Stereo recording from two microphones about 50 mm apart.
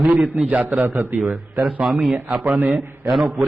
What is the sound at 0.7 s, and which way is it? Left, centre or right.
Speech, right.